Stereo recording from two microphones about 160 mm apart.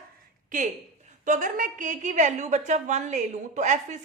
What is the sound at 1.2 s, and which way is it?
A woman's voice, 55° right (ahead or behind).